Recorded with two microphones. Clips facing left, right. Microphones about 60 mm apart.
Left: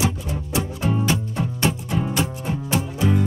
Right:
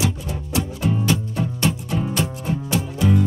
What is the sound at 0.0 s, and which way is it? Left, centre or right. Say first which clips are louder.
Music: even; left.